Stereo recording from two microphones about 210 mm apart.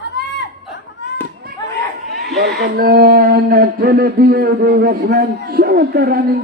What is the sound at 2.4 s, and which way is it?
Speech, 50° right (ahead or behind).